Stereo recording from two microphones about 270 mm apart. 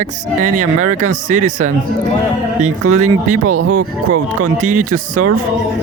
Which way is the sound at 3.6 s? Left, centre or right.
Right.